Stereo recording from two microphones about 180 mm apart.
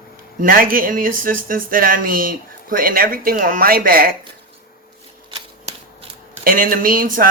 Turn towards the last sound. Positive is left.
turn(degrees=-50)  # may be behind; listen again after turning